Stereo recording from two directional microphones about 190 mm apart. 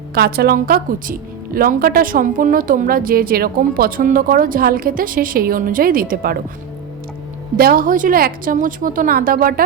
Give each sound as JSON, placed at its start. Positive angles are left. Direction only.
{"t": 0.1, "sound": "a woman's voice", "side_deg": -55}
{"t": 7.5, "sound": "a woman's voice", "side_deg": -50}